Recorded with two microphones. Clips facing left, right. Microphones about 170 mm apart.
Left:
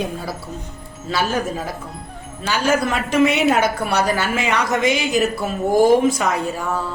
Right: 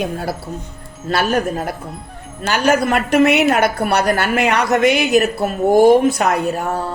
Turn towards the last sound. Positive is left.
turn(degrees=-65)  # may be behind; listen again after turning